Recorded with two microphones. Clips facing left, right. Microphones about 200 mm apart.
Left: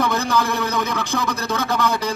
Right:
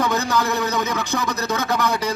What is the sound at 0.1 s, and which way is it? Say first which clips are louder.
A man's voice: even; 10° left (ahead or behind).